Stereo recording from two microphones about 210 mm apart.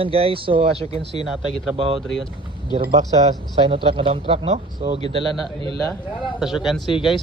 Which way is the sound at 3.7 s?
25° right (ahead or behind).